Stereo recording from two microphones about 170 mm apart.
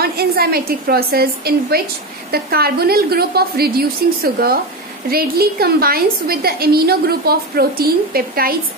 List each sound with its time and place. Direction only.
0.0 s a woman's voice: 65° right (ahead or behind)